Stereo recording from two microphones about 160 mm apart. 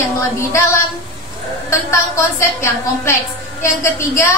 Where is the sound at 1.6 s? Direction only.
20° left (ahead or behind).